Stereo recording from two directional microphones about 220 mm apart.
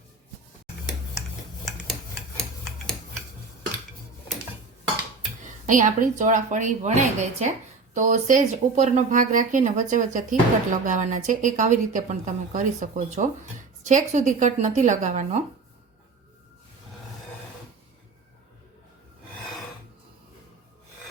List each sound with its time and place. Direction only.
5.6 s speech: 35° right (ahead or behind)